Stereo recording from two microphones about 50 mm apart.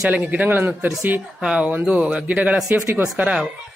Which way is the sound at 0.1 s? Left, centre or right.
Right.